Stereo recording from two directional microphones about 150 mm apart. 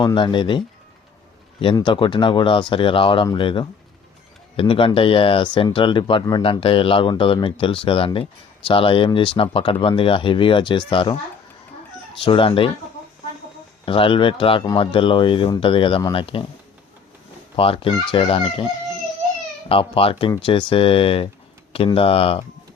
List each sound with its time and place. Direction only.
0.0 s speech: 30° left (ahead or behind)
1.6 s speech: 30° left (ahead or behind)
12.2 s speech: 35° left (ahead or behind)
13.8 s speech: 35° left (ahead or behind)
17.6 s speech: 40° left (ahead or behind)